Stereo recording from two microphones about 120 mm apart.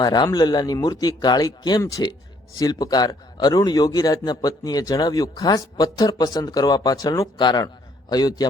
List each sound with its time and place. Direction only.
0.0 s a man's voice: 35° left (ahead or behind)